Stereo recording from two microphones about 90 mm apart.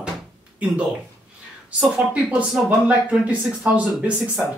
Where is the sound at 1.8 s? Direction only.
15° right (ahead or behind).